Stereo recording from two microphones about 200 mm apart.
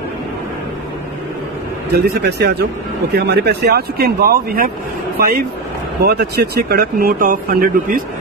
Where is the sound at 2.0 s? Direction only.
55° right (ahead or behind).